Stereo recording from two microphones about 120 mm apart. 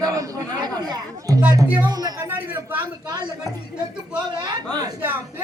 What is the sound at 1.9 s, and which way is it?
Speech, 35° right (ahead or behind).